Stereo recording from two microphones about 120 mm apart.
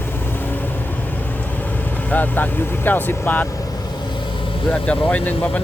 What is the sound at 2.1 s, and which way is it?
Speech, 15° left (ahead or behind).